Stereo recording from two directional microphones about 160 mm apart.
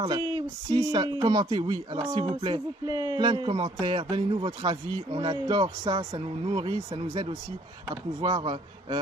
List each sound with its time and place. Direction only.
0.0 s speech: 25° right (ahead or behind)